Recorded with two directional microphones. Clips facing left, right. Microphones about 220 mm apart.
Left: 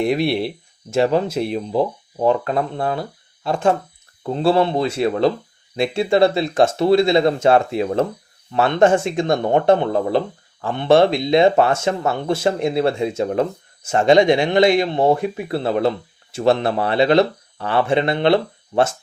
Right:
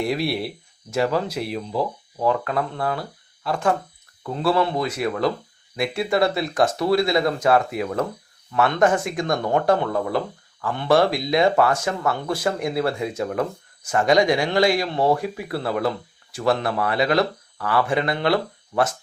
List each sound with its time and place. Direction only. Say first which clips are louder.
0.0 s speech: left 5 dB; 20° left (ahead or behind)